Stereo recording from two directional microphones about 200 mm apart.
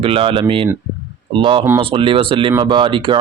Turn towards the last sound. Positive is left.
turn(degrees=-25)  # may be behind; listen again after turning